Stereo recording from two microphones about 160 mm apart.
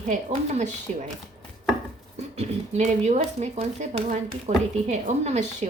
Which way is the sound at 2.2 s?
40° right (ahead or behind).